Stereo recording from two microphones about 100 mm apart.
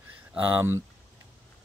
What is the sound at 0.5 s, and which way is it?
Speech, 25° right (ahead or behind).